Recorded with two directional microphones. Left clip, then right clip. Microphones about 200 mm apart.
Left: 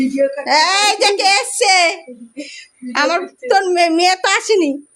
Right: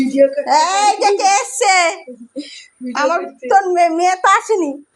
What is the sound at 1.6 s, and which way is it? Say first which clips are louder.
Speech: left 1 dB; 15° left (ahead or behind).